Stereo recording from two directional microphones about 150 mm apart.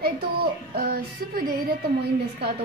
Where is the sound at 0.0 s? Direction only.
85° right.